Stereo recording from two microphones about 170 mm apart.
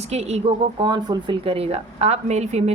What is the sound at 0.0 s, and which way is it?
Speech, 40° right (ahead or behind).